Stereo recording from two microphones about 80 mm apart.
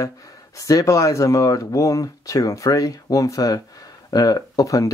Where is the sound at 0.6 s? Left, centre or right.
Left.